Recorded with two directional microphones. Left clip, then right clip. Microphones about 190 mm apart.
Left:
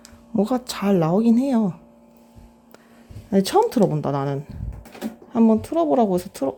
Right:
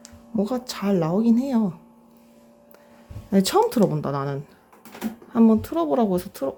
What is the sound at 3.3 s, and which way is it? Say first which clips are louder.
Speech: left 1 dB; 10° left (ahead or behind).